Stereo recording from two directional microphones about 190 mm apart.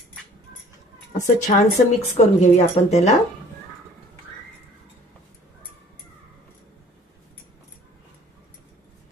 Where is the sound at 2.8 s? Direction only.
35° left (ahead or behind).